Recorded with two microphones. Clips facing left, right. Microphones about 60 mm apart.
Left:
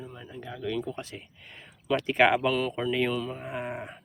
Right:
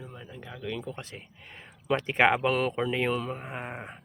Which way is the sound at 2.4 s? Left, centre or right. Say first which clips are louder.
Right 1 dB; right.